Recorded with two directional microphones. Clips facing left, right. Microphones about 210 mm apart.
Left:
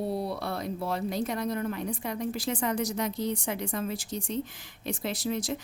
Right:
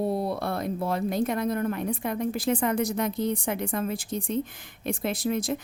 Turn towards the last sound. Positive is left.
turn(degrees=-55)  # may be behind; listen again after turning